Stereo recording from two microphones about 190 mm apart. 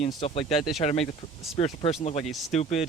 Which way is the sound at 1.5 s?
30° left (ahead or behind).